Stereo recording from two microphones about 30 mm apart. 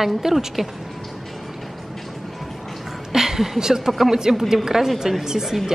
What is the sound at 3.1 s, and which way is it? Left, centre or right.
A woman's voice, centre.